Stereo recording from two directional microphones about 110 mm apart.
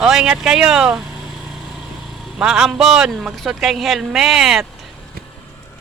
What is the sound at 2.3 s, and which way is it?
Speech, 5° right (ahead or behind).